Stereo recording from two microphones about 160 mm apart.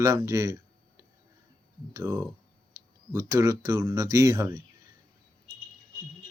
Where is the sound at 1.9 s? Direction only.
20° right (ahead or behind).